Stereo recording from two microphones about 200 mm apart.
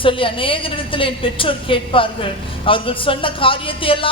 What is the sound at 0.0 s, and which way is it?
A woman's voice, 25° left (ahead or behind).